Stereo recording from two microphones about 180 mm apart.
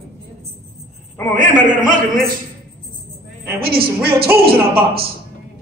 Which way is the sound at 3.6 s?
60° right (ahead or behind).